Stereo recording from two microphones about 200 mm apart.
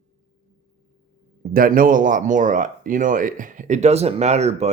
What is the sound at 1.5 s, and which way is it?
Speech, 45° right (ahead or behind).